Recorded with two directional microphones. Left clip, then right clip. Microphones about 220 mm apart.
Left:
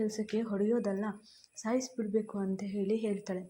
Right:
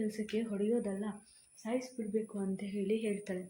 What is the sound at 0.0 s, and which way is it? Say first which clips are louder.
A woman's voice: left 3 dB; 15° left (ahead or behind).